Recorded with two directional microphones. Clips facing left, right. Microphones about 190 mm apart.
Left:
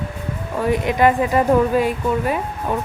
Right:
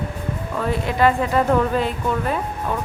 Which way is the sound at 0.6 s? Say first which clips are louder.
Left 3 dB; 15° left (ahead or behind).